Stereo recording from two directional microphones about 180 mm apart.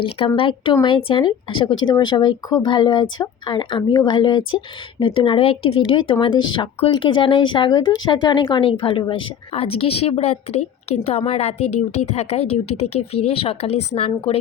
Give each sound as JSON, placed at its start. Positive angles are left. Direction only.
{"t": 0.3, "sound": "a woman's voice", "side_deg": 30}